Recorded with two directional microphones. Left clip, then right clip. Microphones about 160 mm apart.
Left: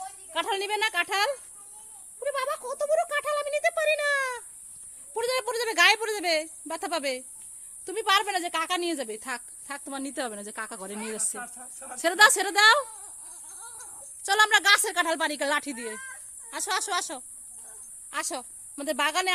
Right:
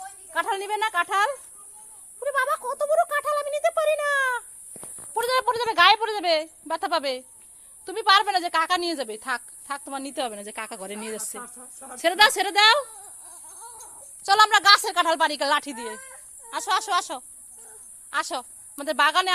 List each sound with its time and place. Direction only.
0.3 s a woman's voice: 20° left (ahead or behind)
2.2 s a sound: 10° left (ahead or behind)
2.6 s speech: 10° left (ahead or behind)
4.2 s a woman's voice: 25° left (ahead or behind)
14.3 s a woman's voice: 25° left (ahead or behind)